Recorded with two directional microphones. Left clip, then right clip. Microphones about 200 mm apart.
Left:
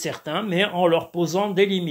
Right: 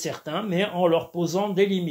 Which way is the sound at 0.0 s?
25° left (ahead or behind).